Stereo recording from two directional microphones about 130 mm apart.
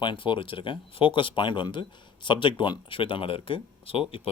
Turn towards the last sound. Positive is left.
turn(degrees=45)  # may be behind; listen again after turning